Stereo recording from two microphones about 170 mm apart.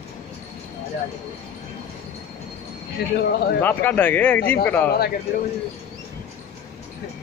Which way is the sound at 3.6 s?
10° left (ahead or behind).